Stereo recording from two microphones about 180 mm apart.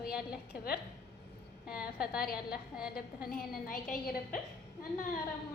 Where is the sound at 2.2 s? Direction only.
55° left (ahead or behind).